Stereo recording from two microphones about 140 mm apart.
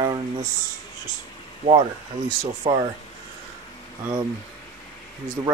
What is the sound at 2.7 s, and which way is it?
Speech, 35° right (ahead or behind).